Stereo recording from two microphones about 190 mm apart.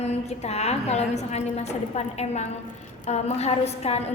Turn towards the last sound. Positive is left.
turn(degrees=35)  # may be behind; listen again after turning